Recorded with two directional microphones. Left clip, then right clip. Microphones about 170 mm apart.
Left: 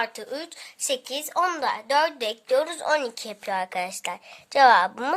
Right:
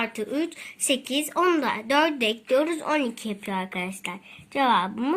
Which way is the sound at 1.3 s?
30° left (ahead or behind).